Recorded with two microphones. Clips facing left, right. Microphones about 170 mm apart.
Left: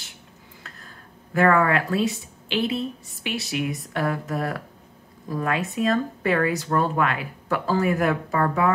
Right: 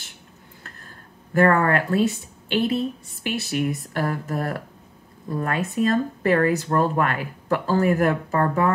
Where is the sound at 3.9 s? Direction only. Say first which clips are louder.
Even; 35° right (ahead or behind).